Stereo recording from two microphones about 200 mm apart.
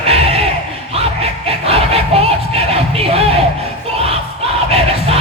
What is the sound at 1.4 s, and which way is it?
Music, 30° right (ahead or behind).